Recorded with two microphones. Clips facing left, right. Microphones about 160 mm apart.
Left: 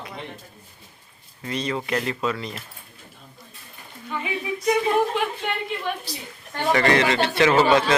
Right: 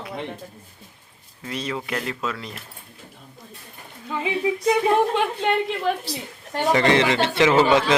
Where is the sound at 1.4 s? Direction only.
5° right (ahead or behind).